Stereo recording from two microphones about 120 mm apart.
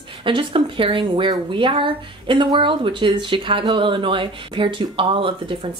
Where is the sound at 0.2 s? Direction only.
45° right (ahead or behind).